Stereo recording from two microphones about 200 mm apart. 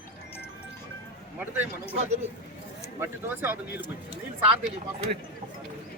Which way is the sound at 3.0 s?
10° right (ahead or behind).